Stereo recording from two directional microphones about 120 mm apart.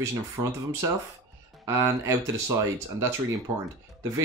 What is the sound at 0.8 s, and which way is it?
Speech, 30° right (ahead or behind).